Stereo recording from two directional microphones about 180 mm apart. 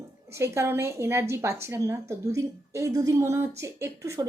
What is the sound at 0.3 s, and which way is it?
A woman's voice, 15° right (ahead or behind).